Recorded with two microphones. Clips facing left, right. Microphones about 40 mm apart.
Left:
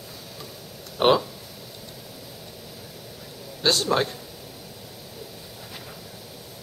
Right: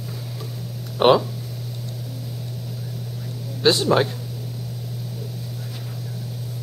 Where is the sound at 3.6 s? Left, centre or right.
Centre.